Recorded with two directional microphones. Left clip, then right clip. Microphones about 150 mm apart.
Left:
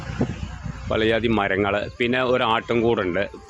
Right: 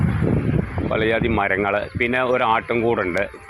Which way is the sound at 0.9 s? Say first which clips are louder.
Even; 35° left (ahead or behind).